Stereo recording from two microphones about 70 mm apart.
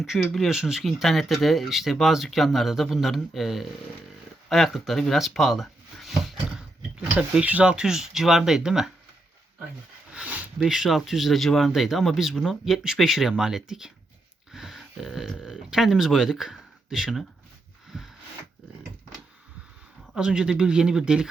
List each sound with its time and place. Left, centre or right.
0.2 s speech: centre
7.2 s speech: centre
10.1 s a sound: centre
10.6 s speech: centre
17.9 s a sound: centre
20.1 s speech: centre